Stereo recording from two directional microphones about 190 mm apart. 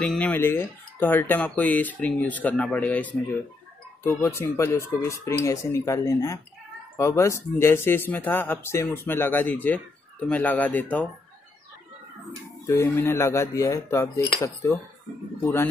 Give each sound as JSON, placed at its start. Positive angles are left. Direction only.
{"t": 0.0, "sound": "speech", "side_deg": 5}
{"t": 12.6, "sound": "speech", "side_deg": 10}